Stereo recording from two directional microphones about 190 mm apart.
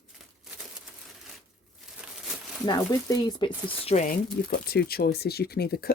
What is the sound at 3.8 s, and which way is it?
Speech, 40° left (ahead or behind).